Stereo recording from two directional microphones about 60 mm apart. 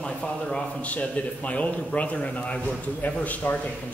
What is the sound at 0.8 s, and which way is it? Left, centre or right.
A man's voice, left.